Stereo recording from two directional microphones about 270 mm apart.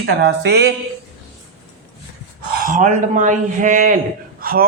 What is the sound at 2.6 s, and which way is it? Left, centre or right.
Speech, right.